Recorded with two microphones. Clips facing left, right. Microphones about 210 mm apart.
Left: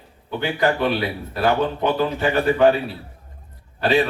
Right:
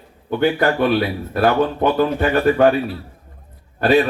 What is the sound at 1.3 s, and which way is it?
A man's voice, 50° right (ahead or behind).